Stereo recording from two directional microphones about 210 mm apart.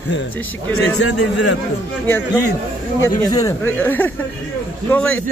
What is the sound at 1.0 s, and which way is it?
Speech, 90° left.